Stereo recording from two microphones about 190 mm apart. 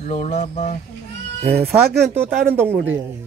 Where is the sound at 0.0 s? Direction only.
40° left (ahead or behind).